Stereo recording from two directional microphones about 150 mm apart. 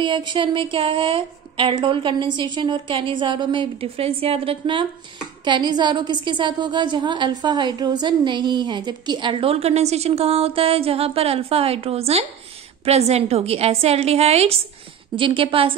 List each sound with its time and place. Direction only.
0.0 s a woman's voice: 30° right (ahead or behind)